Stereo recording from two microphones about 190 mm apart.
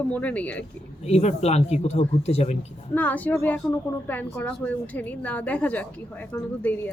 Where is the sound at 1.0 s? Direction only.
35° left (ahead or behind).